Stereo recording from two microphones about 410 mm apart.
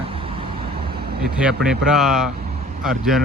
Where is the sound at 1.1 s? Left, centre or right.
Right.